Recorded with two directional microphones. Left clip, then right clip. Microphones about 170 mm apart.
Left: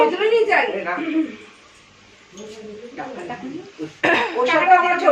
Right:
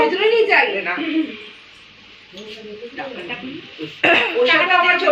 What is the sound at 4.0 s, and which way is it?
Speech, 10° left (ahead or behind).